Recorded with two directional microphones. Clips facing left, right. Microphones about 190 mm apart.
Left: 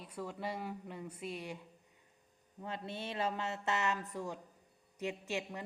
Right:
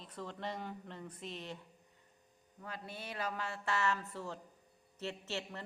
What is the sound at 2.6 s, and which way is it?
Speech, 25° left (ahead or behind).